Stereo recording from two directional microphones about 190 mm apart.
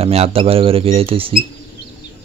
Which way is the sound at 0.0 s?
30° right (ahead or behind).